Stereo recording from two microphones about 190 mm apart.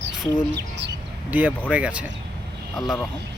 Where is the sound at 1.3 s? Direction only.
10° right (ahead or behind).